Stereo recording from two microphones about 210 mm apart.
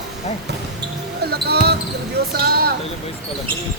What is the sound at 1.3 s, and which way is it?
Basketball bounce, 50° right (ahead or behind).